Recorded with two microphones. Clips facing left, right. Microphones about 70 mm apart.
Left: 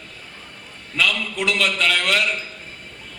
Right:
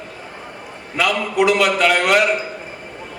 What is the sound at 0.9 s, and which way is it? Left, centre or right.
A man's voice, right.